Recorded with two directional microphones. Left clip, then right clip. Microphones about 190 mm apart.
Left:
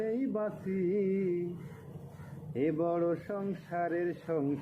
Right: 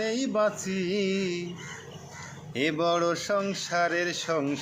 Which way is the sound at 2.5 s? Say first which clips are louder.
Right 5 dB; 25° right (ahead or behind).